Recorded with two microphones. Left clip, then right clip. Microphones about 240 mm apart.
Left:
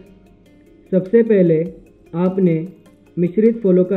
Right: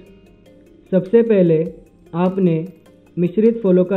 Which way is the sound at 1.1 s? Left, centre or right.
Centre.